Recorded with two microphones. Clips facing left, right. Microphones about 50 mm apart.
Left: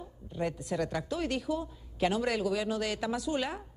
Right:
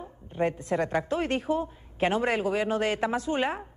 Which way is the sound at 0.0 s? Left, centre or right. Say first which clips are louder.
Right 6 dB; right.